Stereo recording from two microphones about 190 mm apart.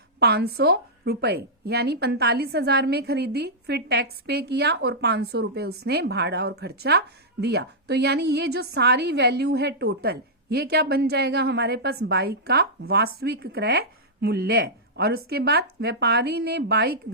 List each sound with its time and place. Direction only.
0.2 s a woman's voice: 60° right (ahead or behind)